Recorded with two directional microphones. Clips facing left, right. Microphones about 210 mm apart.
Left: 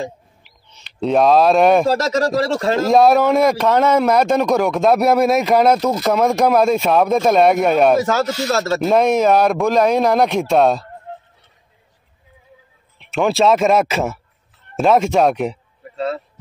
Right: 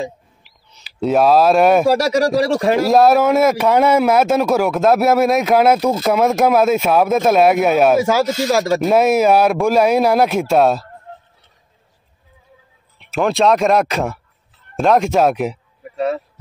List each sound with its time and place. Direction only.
0.0 s speech: centre (ahead or behind)
2.9 s speech: centre (ahead or behind)
13.0 s speech: centre (ahead or behind)
15.8 s a sound: 15° right (ahead or behind)